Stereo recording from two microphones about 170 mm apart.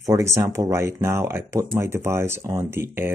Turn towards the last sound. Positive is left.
turn(degrees=-15)  # may be behind; listen again after turning